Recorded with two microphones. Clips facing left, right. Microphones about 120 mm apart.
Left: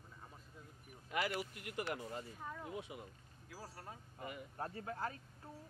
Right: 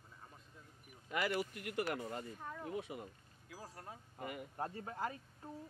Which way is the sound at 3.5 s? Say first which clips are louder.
Right 1 dB; 5° left (ahead or behind).